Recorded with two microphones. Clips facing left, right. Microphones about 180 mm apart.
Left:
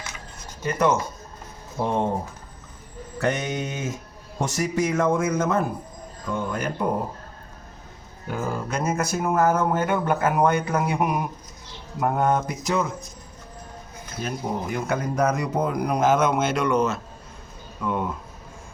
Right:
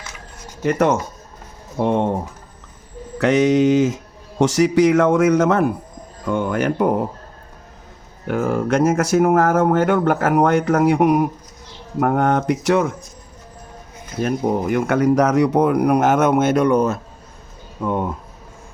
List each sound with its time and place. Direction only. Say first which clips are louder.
0.6 s speech: right 5 dB; 70° right (ahead or behind)
3.2 s speech: right 11 dB; 85° right; by 6.9 s 70° right (ahead or behind)
8.3 s speech: right 9 dB; 70° right (ahead or behind)
14.2 s speech: right 9 dB; 65° right (ahead or behind)